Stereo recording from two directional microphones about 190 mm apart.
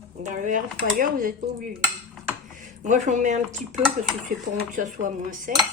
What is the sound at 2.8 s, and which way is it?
Speech, 40° right (ahead or behind).